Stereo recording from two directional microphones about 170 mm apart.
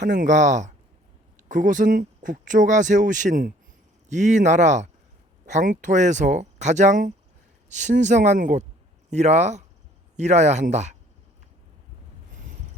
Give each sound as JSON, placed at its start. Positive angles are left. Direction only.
{"t": 0.1, "sound": "speech", "side_deg": -50}